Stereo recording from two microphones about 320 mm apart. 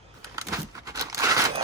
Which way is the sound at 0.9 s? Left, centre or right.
Centre.